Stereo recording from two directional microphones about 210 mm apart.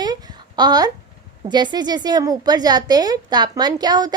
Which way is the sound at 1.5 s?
20° right (ahead or behind).